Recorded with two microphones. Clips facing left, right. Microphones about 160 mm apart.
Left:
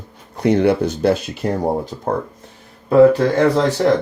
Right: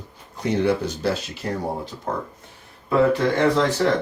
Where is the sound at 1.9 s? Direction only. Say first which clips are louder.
Left 6 dB; 40° left (ahead or behind).